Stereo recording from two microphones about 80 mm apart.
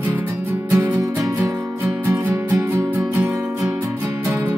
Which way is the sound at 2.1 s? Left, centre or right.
Right.